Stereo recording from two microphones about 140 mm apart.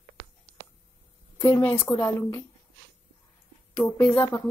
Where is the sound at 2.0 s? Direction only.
15° left (ahead or behind).